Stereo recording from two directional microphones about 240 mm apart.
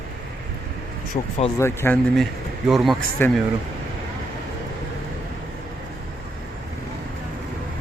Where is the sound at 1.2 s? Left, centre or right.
Left.